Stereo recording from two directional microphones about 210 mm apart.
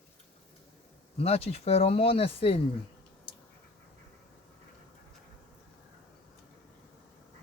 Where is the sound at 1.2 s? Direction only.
30° left (ahead or behind).